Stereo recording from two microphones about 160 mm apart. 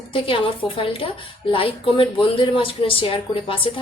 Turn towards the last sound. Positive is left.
turn(degrees=35)  # may be behind; listen again after turning